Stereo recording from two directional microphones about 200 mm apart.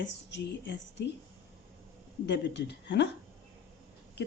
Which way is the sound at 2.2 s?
60° left (ahead or behind).